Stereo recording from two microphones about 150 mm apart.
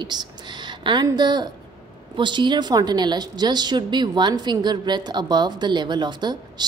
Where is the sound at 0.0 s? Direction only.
30° right (ahead or behind).